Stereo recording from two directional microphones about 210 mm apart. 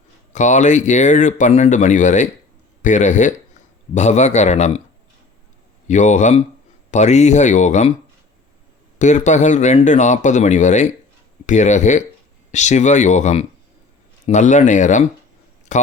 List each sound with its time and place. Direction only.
0.3 s speech: 35° left (ahead or behind)
5.9 s speech: 35° left (ahead or behind)
9.0 s speech: 35° left (ahead or behind)